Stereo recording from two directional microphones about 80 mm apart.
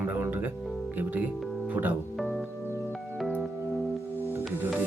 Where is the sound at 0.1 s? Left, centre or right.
Right.